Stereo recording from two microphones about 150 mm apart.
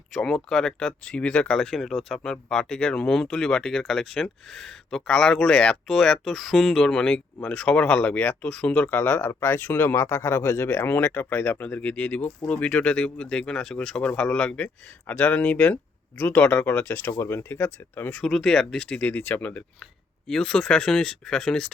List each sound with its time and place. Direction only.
0.1 s speech: 5° left (ahead or behind)